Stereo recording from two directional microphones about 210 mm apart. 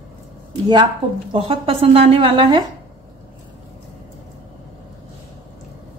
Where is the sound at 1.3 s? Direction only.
25° right (ahead or behind).